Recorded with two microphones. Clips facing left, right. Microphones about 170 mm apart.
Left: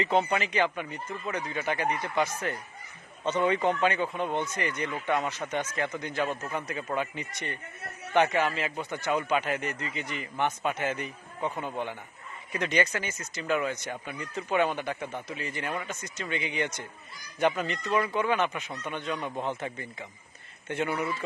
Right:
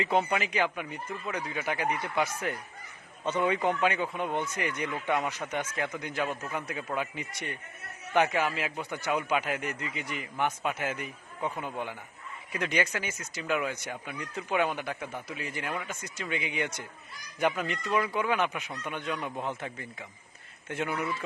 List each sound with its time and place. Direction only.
0.0 s speech: 5° right (ahead or behind)